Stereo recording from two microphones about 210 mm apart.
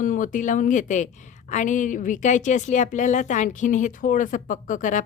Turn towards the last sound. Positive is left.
turn(degrees=35)  # may be behind; listen again after turning